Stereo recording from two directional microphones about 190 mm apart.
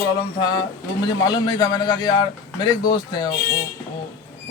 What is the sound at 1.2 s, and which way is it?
A man's voice, 25° left (ahead or behind).